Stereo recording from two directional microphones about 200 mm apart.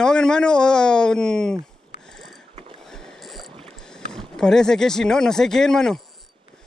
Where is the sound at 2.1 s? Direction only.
Centre (ahead or behind).